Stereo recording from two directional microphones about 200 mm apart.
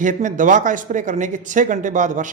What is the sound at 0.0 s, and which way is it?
A man's voice, 40° right (ahead or behind).